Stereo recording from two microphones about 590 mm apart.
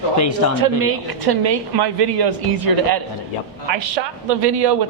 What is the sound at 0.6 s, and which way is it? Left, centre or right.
A man's voice, right.